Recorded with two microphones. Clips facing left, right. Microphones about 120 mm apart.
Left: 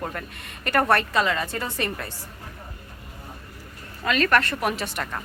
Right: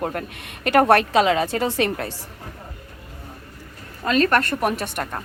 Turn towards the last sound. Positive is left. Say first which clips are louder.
# right 3 dB
turn(degrees=-55)  # may be behind; listen again after turning